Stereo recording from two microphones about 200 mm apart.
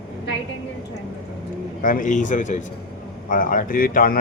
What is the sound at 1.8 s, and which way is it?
A man's voice, 40° left (ahead or behind).